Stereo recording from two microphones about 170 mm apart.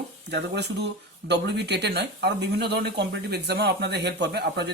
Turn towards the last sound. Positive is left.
turn(degrees=-75)  # may be behind; listen again after turning